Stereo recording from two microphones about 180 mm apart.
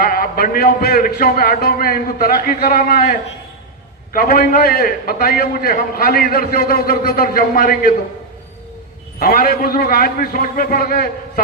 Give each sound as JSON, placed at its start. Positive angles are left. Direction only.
{"t": 0.0, "sound": "a man's voice", "side_deg": 55}
{"t": 9.2, "sound": "a man's voice", "side_deg": 55}